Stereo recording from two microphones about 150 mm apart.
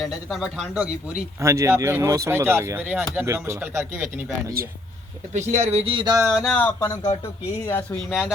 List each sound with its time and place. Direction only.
0.0 s speech: centre (ahead or behind)
1.4 s speech: 20° right (ahead or behind)
5.3 s speech: 50° right (ahead or behind)
5.6 s a sound: 40° right (ahead or behind)
6.3 s speech: centre (ahead or behind)
6.6 s speech: 10° left (ahead or behind)
6.8 s speech: 25° left (ahead or behind)
7.7 s speech: 15° left (ahead or behind)